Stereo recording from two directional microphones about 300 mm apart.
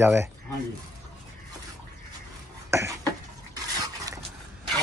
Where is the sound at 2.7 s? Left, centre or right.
Centre.